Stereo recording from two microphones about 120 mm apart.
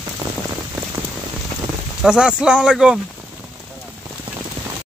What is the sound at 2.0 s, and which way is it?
Speech, 5° right (ahead or behind).